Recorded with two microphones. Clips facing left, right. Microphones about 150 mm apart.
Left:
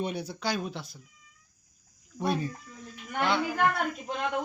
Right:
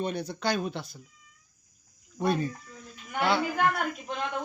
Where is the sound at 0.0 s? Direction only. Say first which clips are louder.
Right 2 dB; 10° left (ahead or behind).